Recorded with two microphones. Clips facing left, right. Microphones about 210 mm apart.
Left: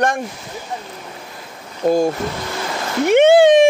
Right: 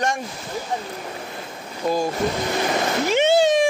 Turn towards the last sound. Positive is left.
turn(degrees=55)  # may be behind; listen again after turning